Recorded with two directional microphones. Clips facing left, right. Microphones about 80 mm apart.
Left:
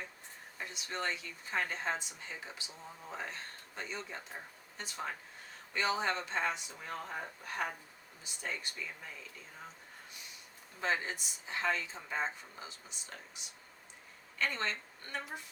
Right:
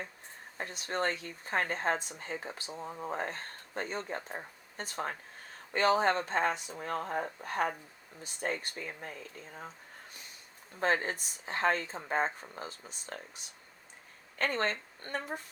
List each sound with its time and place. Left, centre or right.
0.5 s speech: right
10.8 s a woman's voice: right